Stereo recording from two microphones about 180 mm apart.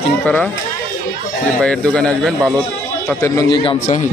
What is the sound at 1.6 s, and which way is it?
Speech, 5° left (ahead or behind).